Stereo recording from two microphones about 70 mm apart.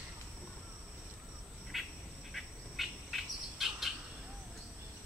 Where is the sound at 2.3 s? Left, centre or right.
Centre.